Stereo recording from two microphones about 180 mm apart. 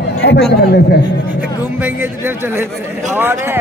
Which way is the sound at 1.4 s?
10° right (ahead or behind).